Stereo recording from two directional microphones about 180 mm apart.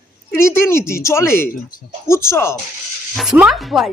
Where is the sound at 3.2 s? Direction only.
5° right (ahead or behind).